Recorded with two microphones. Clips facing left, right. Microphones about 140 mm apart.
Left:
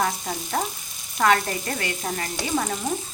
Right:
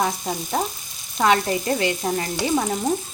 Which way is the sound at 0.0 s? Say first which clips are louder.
Right 2 dB; 20° right (ahead or behind).